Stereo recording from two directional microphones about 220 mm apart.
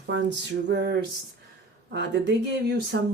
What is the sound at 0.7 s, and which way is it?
Speech, 45° right (ahead or behind).